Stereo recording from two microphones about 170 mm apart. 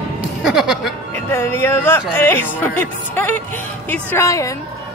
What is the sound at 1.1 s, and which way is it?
Speech, 15° left (ahead or behind).